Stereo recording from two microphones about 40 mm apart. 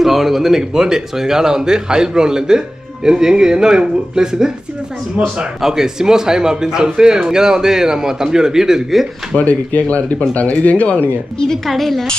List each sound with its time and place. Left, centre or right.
0.0 s speech: centre
5.6 s speech: centre
9.4 s speech: left
11.6 s speech: centre